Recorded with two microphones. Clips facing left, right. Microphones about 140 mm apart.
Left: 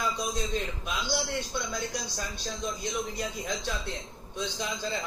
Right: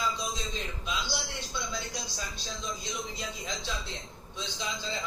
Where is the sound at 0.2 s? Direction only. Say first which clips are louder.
Left 5 dB; 55° left (ahead or behind).